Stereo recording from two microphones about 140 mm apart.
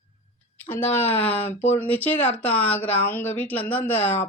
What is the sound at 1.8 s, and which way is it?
Speech, 10° left (ahead or behind).